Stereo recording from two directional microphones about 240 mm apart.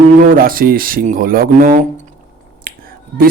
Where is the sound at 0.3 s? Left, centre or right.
Right.